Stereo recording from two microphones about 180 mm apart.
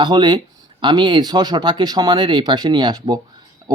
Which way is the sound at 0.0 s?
25° right (ahead or behind).